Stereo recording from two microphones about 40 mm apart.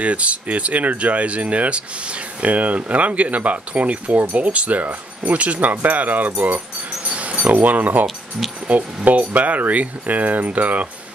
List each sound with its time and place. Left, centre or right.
0.0 s speech: right
7.1 s wind chime: right
7.4 s speech: right